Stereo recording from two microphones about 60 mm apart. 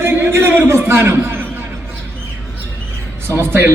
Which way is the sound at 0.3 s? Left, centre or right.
Right.